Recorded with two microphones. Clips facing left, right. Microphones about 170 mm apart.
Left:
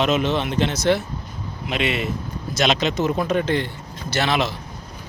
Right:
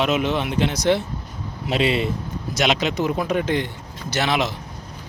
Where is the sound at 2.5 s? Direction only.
10° right (ahead or behind).